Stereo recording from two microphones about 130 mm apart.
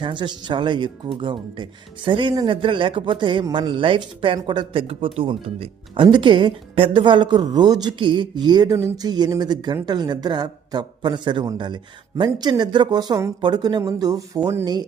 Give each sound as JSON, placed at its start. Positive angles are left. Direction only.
{"t": 0.0, "sound": "speech", "side_deg": -35}